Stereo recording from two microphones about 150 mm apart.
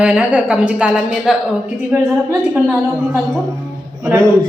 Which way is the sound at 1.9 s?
15° right (ahead or behind).